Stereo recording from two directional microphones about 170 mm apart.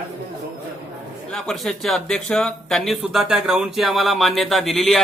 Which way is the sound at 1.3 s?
5° left (ahead or behind).